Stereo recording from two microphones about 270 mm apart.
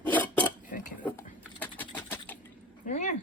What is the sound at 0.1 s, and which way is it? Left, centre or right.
Dishes, centre.